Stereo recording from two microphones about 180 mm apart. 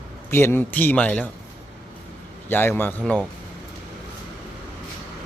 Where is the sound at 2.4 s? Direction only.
10° left (ahead or behind).